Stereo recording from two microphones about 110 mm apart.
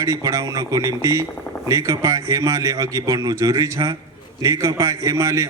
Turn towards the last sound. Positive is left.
turn(degrees=-30)  # may be behind; listen again after turning